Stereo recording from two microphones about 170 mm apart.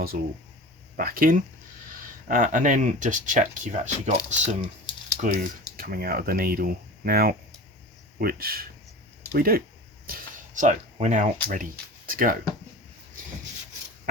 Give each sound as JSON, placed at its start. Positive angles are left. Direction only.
{"t": 0.1, "sound": "speech", "side_deg": -50}
{"t": 10.1, "sound": "a sound", "side_deg": -50}
{"t": 12.0, "sound": "speech", "side_deg": -55}